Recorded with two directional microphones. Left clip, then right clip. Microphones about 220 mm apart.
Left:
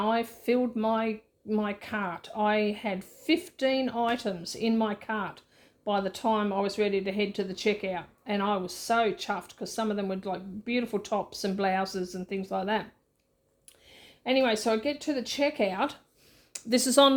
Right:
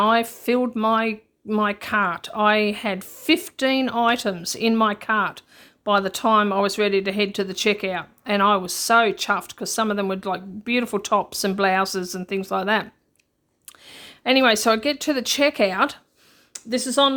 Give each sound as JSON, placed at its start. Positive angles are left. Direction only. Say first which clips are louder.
{"t": 0.0, "sound": "speech", "louder": "right 9 dB", "side_deg": -30}
{"t": 16.5, "sound": "speech", "louder": "right 1 dB", "side_deg": 5}